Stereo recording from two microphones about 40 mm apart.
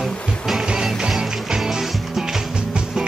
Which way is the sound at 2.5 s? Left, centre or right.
Right.